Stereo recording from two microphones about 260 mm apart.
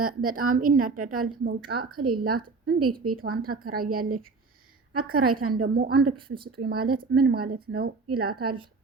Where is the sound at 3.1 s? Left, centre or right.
Right.